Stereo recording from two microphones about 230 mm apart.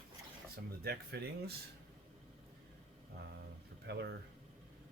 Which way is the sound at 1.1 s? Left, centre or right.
Right.